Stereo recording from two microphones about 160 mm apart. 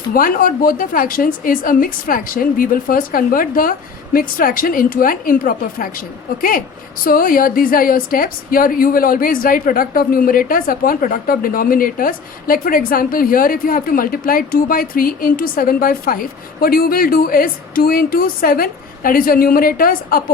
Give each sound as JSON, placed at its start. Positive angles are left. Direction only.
{"t": 0.1, "sound": "a woman's voice", "side_deg": 60}
{"t": 7.0, "sound": "a woman's voice", "side_deg": 60}